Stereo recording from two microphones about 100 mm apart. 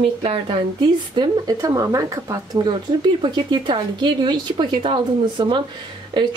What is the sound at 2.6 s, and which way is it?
Speech, 50° right (ahead or behind).